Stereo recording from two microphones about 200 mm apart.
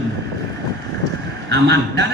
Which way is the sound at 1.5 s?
55° right (ahead or behind).